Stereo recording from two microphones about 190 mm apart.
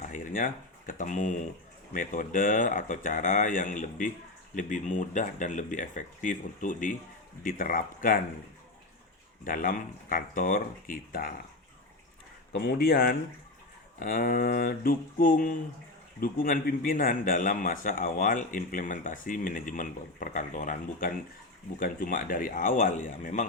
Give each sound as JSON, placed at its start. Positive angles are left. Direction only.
{"t": 0.0, "sound": "a man's voice", "side_deg": 45}
{"t": 9.4, "sound": "a man's voice", "side_deg": 45}
{"t": 12.5, "sound": "a man's voice", "side_deg": 55}